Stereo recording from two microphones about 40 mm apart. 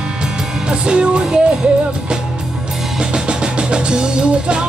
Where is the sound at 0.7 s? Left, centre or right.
Right.